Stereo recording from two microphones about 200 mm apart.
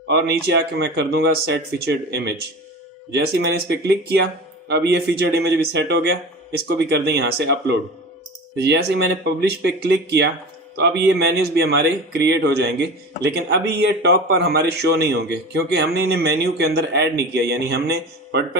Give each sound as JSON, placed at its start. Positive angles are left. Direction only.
{"t": 0.1, "sound": "speech", "side_deg": -55}
{"t": 3.3, "sound": "speech", "side_deg": -55}